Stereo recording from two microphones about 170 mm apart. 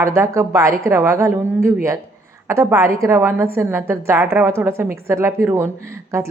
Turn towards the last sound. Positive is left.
turn(degrees=-15)  # may be behind; listen again after turning